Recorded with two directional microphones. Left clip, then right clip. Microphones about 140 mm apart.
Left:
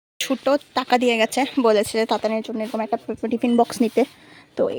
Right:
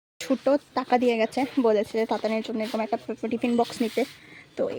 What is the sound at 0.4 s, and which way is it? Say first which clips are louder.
Speech: left 4 dB; 5° right (ahead or behind).